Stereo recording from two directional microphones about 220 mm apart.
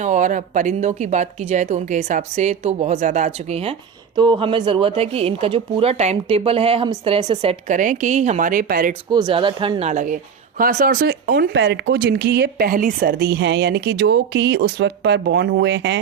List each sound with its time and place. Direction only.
0.0 s speech: 35° right (ahead or behind)
7.7 s speech: 35° right (ahead or behind)
9.0 s speech: 20° right (ahead or behind); by 16.0 s 55° right (ahead or behind)